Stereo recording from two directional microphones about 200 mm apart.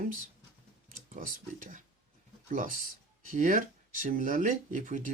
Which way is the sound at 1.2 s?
45° right (ahead or behind).